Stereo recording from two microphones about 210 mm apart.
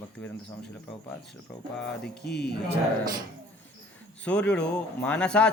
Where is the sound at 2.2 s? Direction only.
50° left (ahead or behind).